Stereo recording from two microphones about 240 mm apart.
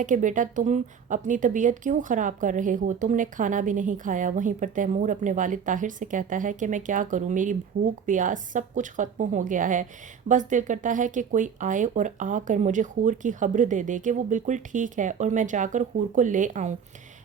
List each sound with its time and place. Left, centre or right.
0.0 s a woman's voice: right